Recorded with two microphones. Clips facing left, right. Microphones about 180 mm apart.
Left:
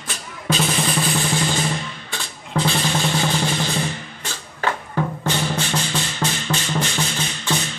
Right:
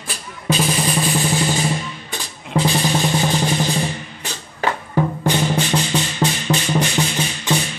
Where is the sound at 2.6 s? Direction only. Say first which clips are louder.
Right 3 dB; 15° right (ahead or behind).